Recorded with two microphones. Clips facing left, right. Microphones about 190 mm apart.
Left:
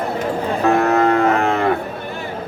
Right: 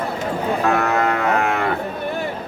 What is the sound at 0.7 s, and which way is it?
Music, 35° left (ahead or behind).